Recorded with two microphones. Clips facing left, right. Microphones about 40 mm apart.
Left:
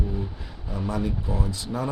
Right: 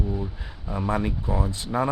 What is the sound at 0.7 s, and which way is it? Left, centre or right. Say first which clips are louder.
Speech: right 2 dB; right.